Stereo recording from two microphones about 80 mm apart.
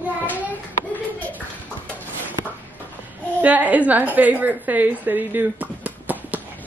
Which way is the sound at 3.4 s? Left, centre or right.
Centre.